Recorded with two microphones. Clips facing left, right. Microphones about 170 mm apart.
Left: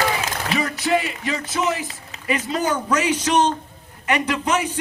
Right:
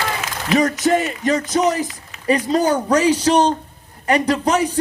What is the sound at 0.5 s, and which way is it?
A man's voice, 40° right (ahead or behind).